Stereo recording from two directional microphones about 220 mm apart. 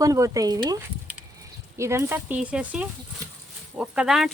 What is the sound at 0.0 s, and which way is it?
Speech, 15° right (ahead or behind).